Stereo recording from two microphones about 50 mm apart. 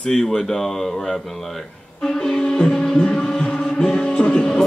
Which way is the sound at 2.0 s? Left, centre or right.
Centre.